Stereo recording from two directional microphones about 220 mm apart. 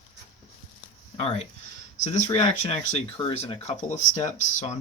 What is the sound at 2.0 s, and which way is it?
Speech, 30° left (ahead or behind).